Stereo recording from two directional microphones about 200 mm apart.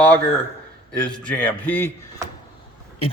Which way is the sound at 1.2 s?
5° left (ahead or behind).